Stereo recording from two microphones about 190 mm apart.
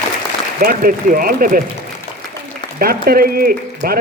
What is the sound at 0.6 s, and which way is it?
A man's voice, 50° right (ahead or behind).